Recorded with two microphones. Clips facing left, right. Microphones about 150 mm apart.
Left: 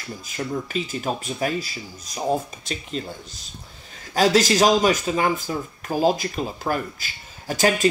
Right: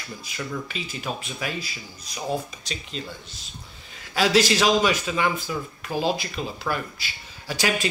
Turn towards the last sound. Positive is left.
turn(degrees=45)  # may be behind; listen again after turning